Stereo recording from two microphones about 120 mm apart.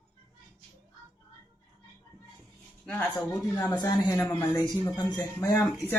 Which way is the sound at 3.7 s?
40° left (ahead or behind).